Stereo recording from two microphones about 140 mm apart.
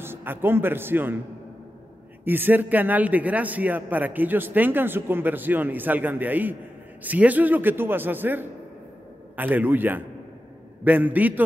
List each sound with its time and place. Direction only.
0.0 s a man's voice: 15° right (ahead or behind)
2.2 s a man's voice: 15° right (ahead or behind)